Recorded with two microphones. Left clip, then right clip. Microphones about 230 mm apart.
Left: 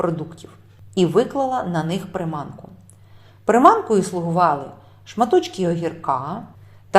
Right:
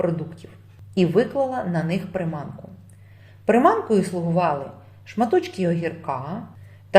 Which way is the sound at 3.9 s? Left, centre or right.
Centre.